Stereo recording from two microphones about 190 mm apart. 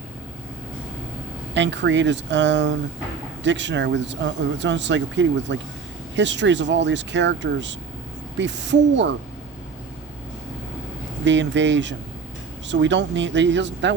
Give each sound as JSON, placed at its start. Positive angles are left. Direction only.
{"t": 1.5, "sound": "speech", "side_deg": -70}
{"t": 11.3, "sound": "speech", "side_deg": -70}